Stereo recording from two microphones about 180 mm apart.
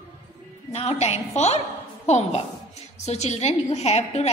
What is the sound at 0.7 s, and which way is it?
A woman's voice, 35° left (ahead or behind).